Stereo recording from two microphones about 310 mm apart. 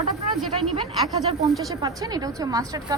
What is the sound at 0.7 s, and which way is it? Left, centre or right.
A woman's voice, centre.